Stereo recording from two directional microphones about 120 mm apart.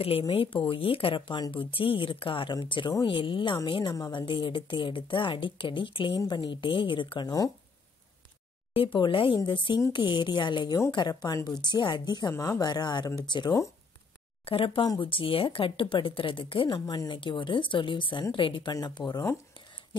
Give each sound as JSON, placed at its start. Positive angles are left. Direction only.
{"t": 0.3, "sound": "speech", "side_deg": 50}
{"t": 8.7, "sound": "speech", "side_deg": 45}
{"t": 14.4, "sound": "speech", "side_deg": 50}